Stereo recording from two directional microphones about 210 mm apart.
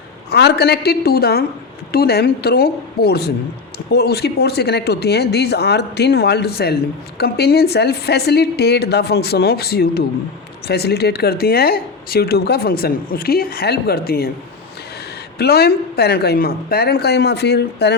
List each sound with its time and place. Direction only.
0.3 s speech: 50° left (ahead or behind)
15.4 s speech: 50° left (ahead or behind)